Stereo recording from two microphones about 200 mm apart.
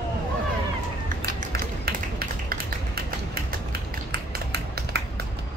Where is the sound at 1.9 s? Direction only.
50° right (ahead or behind).